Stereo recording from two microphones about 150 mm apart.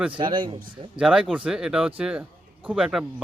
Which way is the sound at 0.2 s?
30° right (ahead or behind).